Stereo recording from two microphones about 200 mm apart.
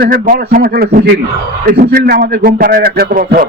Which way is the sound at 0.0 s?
45° right (ahead or behind).